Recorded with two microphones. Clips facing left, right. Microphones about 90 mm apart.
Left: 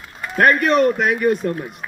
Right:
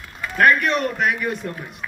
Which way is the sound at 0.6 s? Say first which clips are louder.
Left 5 dB; 50° left (ahead or behind).